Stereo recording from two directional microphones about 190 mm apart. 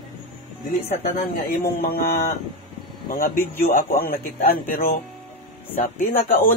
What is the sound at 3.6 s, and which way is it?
Speech, 45° left (ahead or behind).